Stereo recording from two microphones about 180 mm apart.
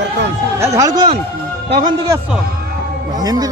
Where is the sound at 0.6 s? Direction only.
20° right (ahead or behind).